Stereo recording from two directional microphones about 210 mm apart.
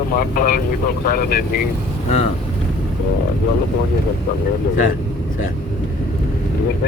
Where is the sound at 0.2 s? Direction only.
45° left (ahead or behind).